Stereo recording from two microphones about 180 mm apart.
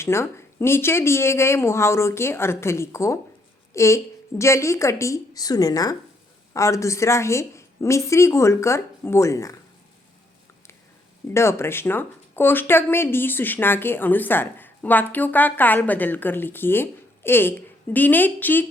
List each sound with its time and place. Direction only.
0.0 s speech: 15° left (ahead or behind)
11.3 s speech: 15° left (ahead or behind)